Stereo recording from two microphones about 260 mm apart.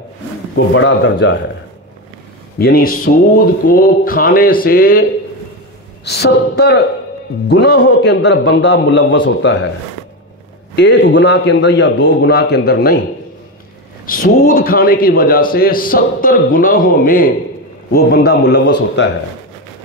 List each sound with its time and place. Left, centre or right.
0.7 s a man's voice: left
2.6 s a man's voice: left
6.0 s a man's voice: left
10.8 s a man's voice: left
14.0 s a man's voice: left